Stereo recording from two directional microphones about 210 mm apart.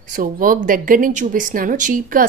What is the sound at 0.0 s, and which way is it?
A woman's voice, 40° right (ahead or behind).